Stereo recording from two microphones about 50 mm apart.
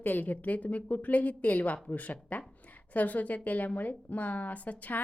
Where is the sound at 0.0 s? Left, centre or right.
Left.